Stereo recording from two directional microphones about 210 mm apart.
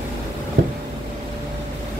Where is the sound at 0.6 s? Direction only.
45° right (ahead or behind).